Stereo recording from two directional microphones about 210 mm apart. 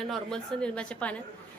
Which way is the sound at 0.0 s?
Centre (ahead or behind).